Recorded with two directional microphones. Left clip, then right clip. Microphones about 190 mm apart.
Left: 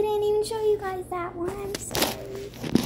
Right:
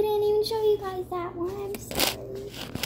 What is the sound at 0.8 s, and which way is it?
Speech, 20° left (ahead or behind).